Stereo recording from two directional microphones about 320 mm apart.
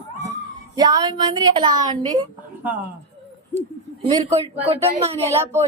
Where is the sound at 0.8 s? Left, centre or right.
Centre.